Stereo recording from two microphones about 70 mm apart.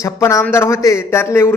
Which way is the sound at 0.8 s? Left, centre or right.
Left.